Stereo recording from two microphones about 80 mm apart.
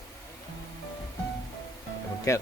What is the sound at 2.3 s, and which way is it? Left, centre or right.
Speech, left.